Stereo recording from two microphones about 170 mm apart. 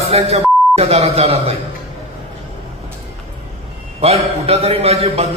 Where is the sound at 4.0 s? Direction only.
35° right (ahead or behind).